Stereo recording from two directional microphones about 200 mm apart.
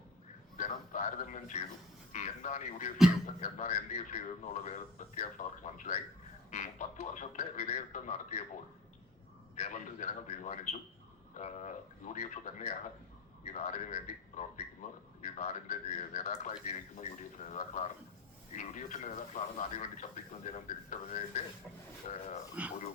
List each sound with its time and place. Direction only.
0.5 s a sound: 40° left (ahead or behind)
2.1 s speech: 35° left (ahead or behind)
9.6 s a man's voice: 40° left (ahead or behind)
22.6 s speech: 5° right (ahead or behind)